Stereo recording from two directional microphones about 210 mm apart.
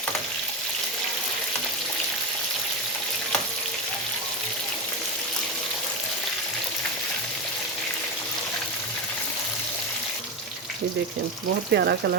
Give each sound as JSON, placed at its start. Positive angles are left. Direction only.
{"t": 11.7, "sound": "speech", "side_deg": -50}